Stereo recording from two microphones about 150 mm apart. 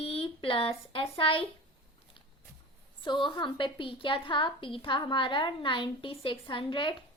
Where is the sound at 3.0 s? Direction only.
30° left (ahead or behind).